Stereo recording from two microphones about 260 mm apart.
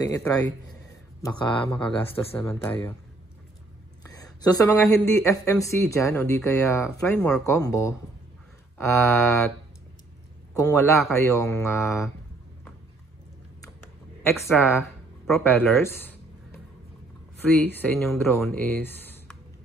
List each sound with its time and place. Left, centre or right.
0.0 s speech: centre
1.7 s speech: centre
4.0 s speech: centre
10.5 s speech: centre
14.2 s speech: centre
15.2 s a sound: centre
17.7 s speech: centre